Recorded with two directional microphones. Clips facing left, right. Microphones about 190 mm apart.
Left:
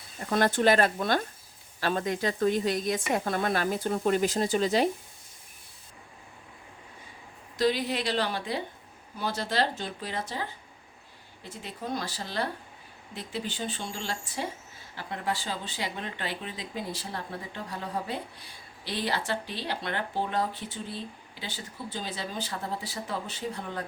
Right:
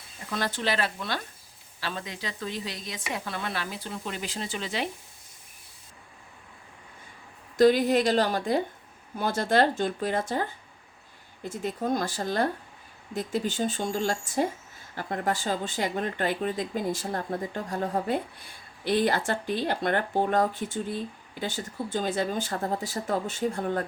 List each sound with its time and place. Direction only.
0.3 s speech: 50° left (ahead or behind)
7.5 s speech: 50° right (ahead or behind)